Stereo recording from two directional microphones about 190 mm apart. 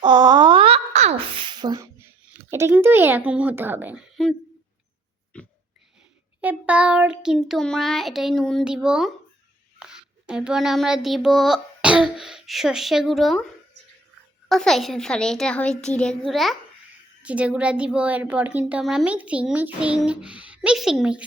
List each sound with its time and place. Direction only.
0.0 s a sound: 25° right (ahead or behind)
2.5 s a child's voice: 10° right (ahead or behind)
5.3 s a sound: 5° left (ahead or behind)
6.4 s child singing: 5° right (ahead or behind)
14.5 s child singing: centre (ahead or behind)
17.2 s a child's voice: 5° right (ahead or behind)